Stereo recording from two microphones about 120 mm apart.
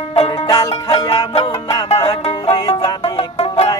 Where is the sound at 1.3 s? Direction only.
55° left (ahead or behind).